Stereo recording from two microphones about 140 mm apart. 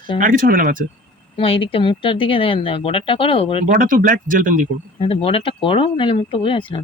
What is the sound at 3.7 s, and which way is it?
Speech, 75° right (ahead or behind).